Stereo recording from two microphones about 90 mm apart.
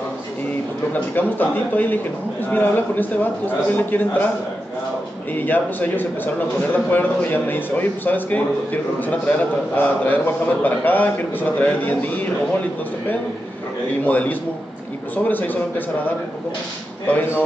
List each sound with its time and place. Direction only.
0.9 s a man's voice: 20° left (ahead or behind)
5.3 s a man's voice: 20° left (ahead or behind)
14.0 s a man's voice: 20° left (ahead or behind)